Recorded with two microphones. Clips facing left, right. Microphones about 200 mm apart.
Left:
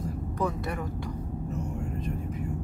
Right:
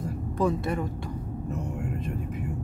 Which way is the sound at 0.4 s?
30° right (ahead or behind).